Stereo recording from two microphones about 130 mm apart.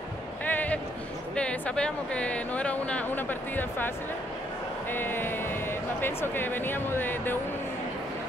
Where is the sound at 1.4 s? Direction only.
10° left (ahead or behind).